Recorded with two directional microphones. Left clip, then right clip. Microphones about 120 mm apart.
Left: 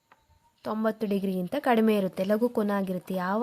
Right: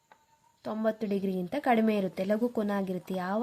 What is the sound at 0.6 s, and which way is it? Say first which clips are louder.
A woman's voice: left 2 dB; 35° left (ahead or behind).